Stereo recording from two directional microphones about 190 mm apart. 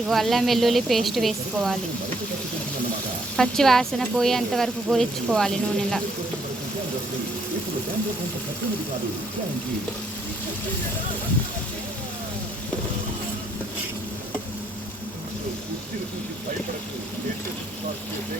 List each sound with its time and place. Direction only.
0.1 s speech: centre (ahead or behind)
3.3 s speech: 5° left (ahead or behind)